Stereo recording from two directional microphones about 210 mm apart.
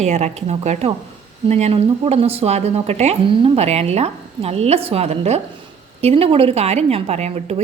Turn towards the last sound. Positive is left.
turn(degrees=-30)  # may be behind; listen again after turning